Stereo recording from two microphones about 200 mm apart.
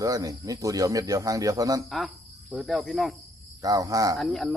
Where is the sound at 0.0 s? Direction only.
15° right (ahead or behind).